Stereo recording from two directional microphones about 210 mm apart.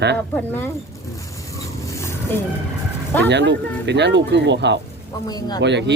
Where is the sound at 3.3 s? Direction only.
55° right (ahead or behind).